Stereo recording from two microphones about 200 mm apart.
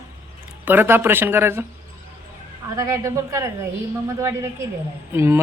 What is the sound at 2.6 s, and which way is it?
Speech, 15° right (ahead or behind).